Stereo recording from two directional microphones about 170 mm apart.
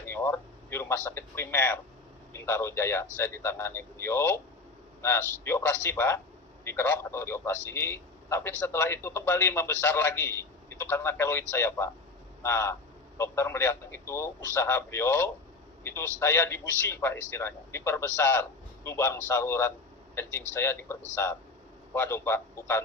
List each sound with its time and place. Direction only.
0.0 s radio: 15° left (ahead or behind)
2.3 s a man's voice: 15° left (ahead or behind)